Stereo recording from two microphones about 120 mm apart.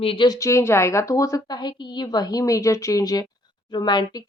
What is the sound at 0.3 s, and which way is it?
Speech, 25° left (ahead or behind).